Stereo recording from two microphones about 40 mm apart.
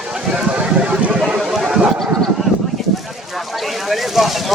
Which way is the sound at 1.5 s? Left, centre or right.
Centre.